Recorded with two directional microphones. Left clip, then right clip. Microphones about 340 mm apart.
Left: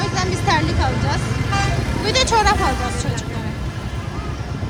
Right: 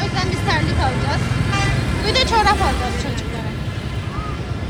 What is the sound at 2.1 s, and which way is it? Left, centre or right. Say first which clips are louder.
Speech: even; centre.